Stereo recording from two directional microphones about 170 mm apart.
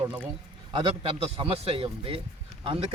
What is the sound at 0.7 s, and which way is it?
Speech, 30° right (ahead or behind).